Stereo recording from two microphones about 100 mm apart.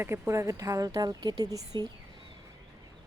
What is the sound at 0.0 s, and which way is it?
Speech, 25° right (ahead or behind).